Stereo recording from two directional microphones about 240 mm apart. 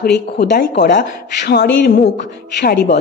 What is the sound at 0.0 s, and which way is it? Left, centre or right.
A woman's voice, left.